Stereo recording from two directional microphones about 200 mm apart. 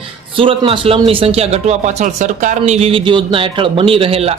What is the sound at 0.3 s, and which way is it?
Speech, 25° right (ahead or behind).